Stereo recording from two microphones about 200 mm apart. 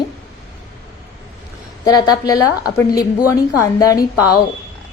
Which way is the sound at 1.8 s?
20° left (ahead or behind).